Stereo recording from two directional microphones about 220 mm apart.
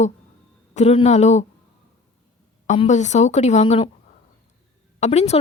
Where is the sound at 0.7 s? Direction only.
30° left (ahead or behind).